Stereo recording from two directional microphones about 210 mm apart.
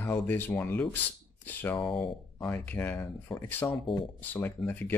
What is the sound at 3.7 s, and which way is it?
Speech, 25° left (ahead or behind).